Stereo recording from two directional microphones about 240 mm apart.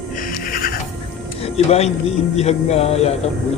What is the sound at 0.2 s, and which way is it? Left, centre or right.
Music, left.